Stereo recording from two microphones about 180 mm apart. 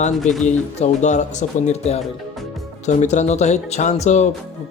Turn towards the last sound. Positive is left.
turn(degrees=40)  # may be behind; listen again after turning